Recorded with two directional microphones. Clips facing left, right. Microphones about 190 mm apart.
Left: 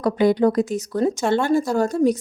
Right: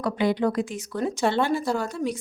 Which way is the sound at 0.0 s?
40° left (ahead or behind).